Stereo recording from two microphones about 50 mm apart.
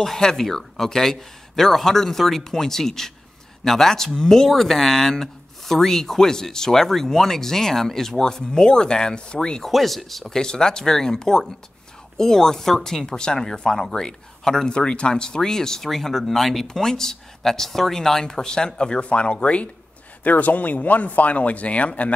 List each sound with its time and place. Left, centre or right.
0.0 s speech: centre
9.7 s speech: centre; by 22.1 s left